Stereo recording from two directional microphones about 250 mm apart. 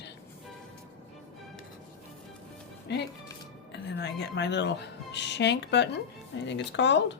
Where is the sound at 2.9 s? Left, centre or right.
Left.